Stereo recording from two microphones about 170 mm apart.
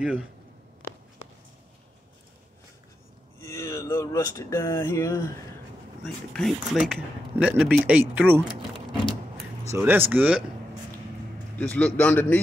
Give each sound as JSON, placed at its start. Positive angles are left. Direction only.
{"t": 3.3, "sound": "speech", "side_deg": 15}
{"t": 6.0, "sound": "speech", "side_deg": 0}
{"t": 9.7, "sound": "speech", "side_deg": -10}
{"t": 11.5, "sound": "speech", "side_deg": 10}